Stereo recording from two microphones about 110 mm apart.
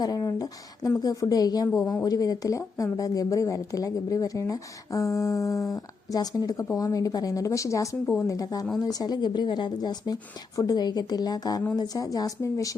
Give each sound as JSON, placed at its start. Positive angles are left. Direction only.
{"t": 0.0, "sound": "speech", "side_deg": 35}
{"t": 8.0, "sound": "speech", "side_deg": 15}
{"t": 8.3, "sound": "speech", "side_deg": 35}